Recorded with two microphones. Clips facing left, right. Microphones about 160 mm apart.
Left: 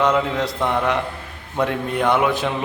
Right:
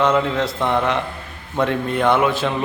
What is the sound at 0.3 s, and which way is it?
A man's voice, 10° left (ahead or behind).